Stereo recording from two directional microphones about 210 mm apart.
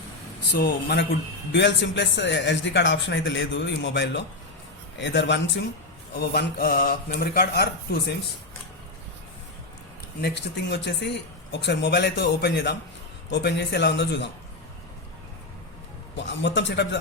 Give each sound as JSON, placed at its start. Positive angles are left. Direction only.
{"t": 0.5, "sound": "speech", "side_deg": 45}
{"t": 10.2, "sound": "speech", "side_deg": 50}
{"t": 16.1, "sound": "speech", "side_deg": 55}